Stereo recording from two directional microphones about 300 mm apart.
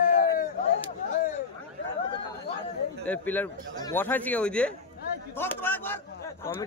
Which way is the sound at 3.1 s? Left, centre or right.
Centre.